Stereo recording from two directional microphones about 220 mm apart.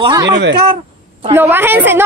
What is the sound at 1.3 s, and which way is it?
Speech, 10° right (ahead or behind).